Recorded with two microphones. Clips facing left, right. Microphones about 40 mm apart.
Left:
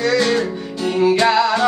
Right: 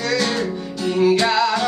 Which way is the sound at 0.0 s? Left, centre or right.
Centre.